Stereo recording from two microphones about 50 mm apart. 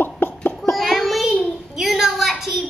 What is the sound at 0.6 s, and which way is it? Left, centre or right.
Child singing, centre.